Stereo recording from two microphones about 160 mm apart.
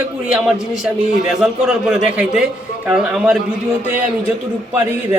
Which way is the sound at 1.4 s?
5° right (ahead or behind).